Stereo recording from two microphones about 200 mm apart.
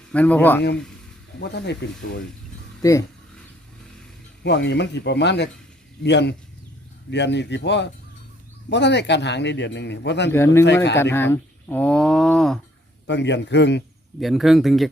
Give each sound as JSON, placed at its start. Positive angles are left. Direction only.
{"t": 0.1, "sound": "a man's voice", "side_deg": 5}
{"t": 1.4, "sound": "speech", "side_deg": 55}
{"t": 2.8, "sound": "a man's voice", "side_deg": 15}
{"t": 4.4, "sound": "speech", "side_deg": 60}
{"t": 10.3, "sound": "a man's voice", "side_deg": 10}
{"t": 13.1, "sound": "speech", "side_deg": 60}
{"t": 14.2, "sound": "speech", "side_deg": 0}